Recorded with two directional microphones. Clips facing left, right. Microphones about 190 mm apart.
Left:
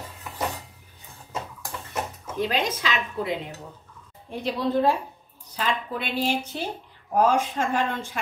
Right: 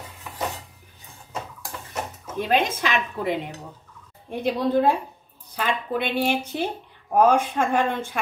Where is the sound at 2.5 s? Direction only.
55° right (ahead or behind).